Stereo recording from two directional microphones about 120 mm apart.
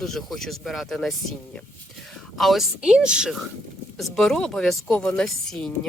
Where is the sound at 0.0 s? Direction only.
Centre (ahead or behind).